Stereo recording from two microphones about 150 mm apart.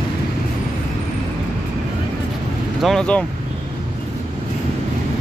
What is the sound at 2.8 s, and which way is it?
Speech, 5° left (ahead or behind).